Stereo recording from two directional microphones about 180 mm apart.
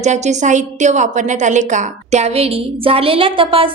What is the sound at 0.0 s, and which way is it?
A woman's voice, 40° right (ahead or behind).